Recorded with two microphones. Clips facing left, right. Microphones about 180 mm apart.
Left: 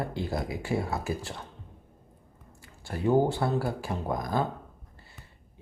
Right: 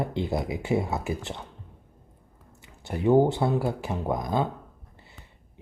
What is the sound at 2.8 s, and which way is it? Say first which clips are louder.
Speech: right 4 dB; 20° right (ahead or behind).